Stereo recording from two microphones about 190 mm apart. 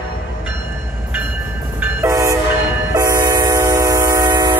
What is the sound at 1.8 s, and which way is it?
Train, 15° right (ahead or behind).